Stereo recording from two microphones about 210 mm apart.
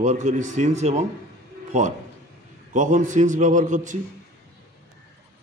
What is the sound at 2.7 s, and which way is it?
A man's voice, 35° right (ahead or behind).